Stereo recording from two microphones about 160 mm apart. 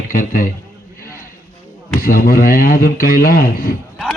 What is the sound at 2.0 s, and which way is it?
A man's voice, 65° left (ahead or behind).